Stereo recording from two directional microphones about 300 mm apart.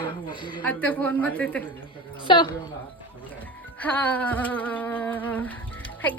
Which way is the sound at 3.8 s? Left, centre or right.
Centre.